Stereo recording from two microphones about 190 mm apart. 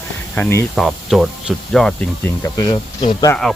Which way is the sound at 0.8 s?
Centre (ahead or behind).